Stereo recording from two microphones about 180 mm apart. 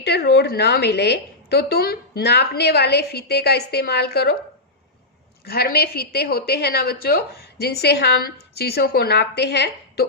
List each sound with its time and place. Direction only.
0.0 s a woman's voice: 65° left (ahead or behind)
5.5 s a woman's voice: 60° left (ahead or behind)